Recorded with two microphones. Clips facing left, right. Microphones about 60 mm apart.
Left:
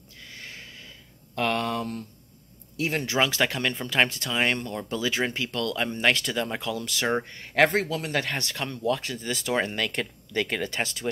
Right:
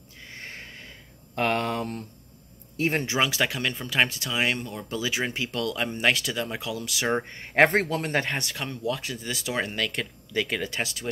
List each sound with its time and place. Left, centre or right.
0.2 s a sound: right
2.8 s a man's voice: right
3.1 s speech: centre
7.2 s a man's voice: right
8.3 s speech: centre